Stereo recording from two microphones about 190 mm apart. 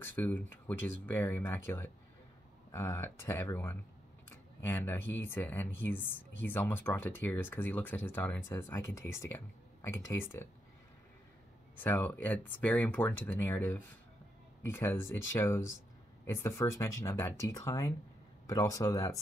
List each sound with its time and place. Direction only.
0.0 s speech: 10° left (ahead or behind)
11.7 s speech: 10° left (ahead or behind)